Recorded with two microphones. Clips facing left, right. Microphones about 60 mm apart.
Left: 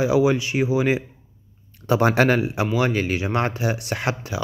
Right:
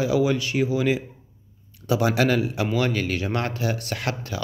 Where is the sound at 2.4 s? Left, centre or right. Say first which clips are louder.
Left 2 dB; left.